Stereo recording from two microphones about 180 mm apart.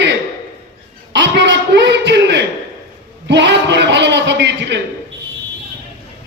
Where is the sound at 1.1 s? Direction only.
85° right.